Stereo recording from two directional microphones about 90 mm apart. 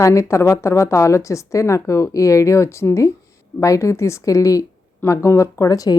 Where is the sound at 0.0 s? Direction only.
35° left (ahead or behind).